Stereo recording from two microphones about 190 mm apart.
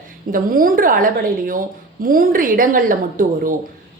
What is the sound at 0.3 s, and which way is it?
Speech, 45° right (ahead or behind).